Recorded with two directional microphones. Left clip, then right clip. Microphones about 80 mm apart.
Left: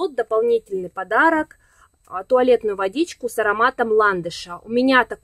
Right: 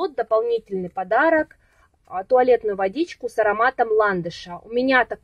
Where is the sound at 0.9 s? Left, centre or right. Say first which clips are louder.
Left 1 dB; left.